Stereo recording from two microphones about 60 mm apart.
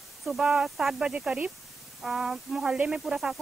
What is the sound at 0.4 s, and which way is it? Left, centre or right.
Speech, centre.